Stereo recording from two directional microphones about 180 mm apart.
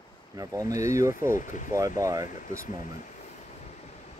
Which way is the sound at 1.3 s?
45° left (ahead or behind).